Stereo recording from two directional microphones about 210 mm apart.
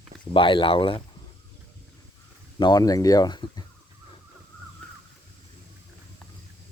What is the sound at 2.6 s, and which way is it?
Speech, 20° left (ahead or behind).